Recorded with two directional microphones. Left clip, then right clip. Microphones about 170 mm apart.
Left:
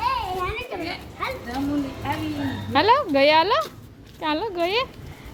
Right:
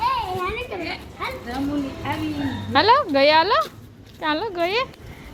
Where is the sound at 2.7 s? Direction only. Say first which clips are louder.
Right 2 dB; 10° left (ahead or behind).